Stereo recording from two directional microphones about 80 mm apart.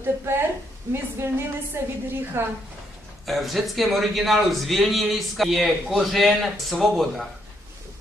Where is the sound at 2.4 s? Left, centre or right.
Right.